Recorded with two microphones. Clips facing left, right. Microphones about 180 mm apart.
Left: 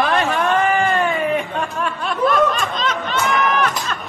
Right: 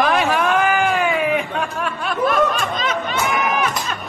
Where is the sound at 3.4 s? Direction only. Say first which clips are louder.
Left 1 dB; 10° right (ahead or behind).